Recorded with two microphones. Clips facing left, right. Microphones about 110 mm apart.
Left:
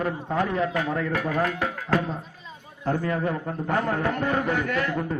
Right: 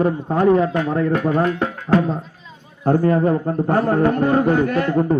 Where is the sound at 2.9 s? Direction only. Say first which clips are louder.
Right 9 dB; 40° right (ahead or behind).